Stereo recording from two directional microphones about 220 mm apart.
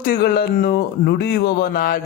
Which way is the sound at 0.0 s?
45° left (ahead or behind).